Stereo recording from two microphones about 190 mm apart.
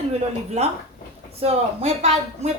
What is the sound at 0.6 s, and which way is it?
Speech, 35° right (ahead or behind).